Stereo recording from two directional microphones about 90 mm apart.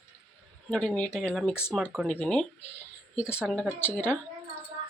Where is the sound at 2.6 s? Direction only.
25° left (ahead or behind).